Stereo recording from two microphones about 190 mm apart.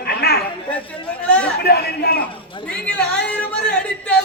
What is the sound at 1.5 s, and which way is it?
Speech, 55° left (ahead or behind).